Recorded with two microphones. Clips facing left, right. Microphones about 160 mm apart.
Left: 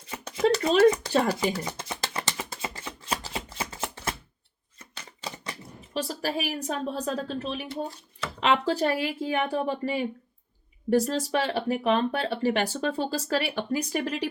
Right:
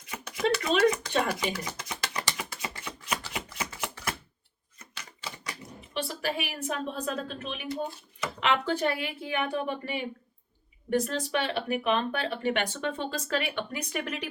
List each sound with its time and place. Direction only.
0.0 s a sound: 30° left (ahead or behind)
4.8 s typewriter: 30° left (ahead or behind)
8.2 s speech: 30° left (ahead or behind)